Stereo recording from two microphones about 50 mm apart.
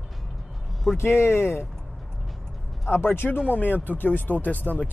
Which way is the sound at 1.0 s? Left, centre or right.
Left.